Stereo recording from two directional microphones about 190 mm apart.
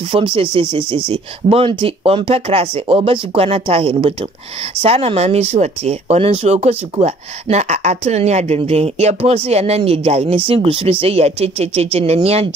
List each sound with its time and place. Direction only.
0.1 s speech: 30° right (ahead or behind)